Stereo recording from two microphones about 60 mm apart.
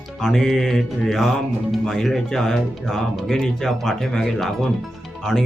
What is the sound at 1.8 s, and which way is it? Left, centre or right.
Speech, centre.